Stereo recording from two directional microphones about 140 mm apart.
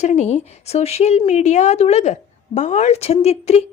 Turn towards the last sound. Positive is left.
turn(degrees=50)  # may be behind; listen again after turning